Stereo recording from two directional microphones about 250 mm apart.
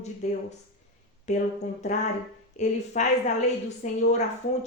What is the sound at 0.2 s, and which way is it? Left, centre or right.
Speech, left.